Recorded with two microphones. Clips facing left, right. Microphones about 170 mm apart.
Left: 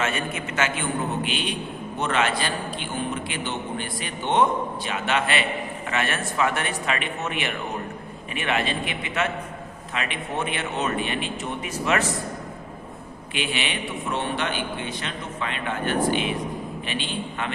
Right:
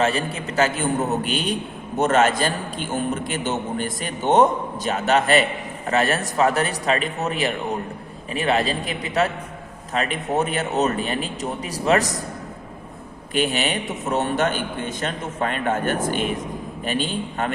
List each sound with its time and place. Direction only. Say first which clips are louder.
0.0 s a man's voice: right 5 dB; 35° right (ahead or behind)
13.3 s a man's voice: right 6 dB; 40° right (ahead or behind)